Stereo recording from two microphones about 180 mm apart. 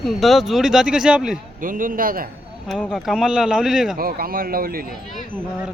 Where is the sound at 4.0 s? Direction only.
55° right (ahead or behind).